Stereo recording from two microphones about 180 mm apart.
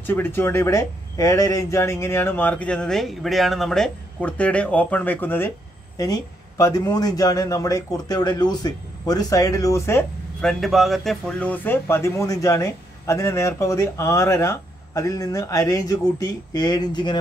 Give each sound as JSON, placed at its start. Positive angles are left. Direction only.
{"t": 0.0, "sound": "a man's voice", "side_deg": 10}
{"t": 10.4, "sound": "a man's voice", "side_deg": 0}